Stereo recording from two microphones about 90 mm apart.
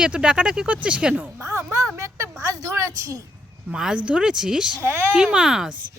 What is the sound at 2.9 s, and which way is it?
Speech, 35° right (ahead or behind).